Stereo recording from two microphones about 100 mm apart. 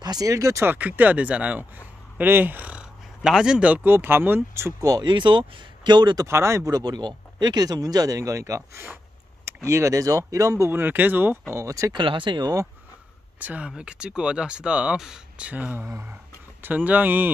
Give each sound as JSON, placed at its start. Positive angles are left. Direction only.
{"t": 0.0, "sound": "speech", "side_deg": -40}
{"t": 0.7, "sound": "speech", "side_deg": -15}
{"t": 4.7, "sound": "speech", "side_deg": -40}
{"t": 6.2, "sound": "speech", "side_deg": -30}
{"t": 10.7, "sound": "speech", "side_deg": -20}
{"t": 11.5, "sound": "speech", "side_deg": -30}
{"t": 11.9, "sound": "speech", "side_deg": -55}
{"t": 13.4, "sound": "speech", "side_deg": -15}